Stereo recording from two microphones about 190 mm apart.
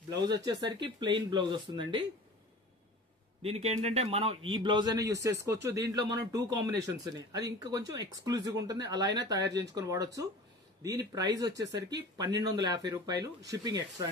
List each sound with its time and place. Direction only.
0.2 s speech: 20° right (ahead or behind)
3.4 s a man's voice: 35° right (ahead or behind)
11.6 s speech: 65° right (ahead or behind)
12.2 s speech: 20° right (ahead or behind)